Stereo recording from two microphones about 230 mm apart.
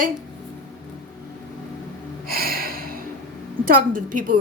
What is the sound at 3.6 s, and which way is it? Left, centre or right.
Speech, right.